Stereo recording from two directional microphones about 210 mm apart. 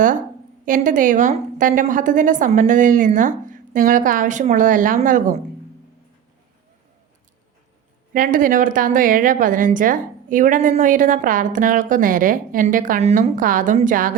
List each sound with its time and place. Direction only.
0.6 s a woman's voice: 40° right (ahead or behind)
8.1 s a woman's voice: 40° right (ahead or behind)